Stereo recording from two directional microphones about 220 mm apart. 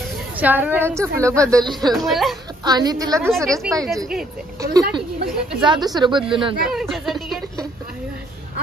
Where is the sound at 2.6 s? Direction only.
20° right (ahead or behind).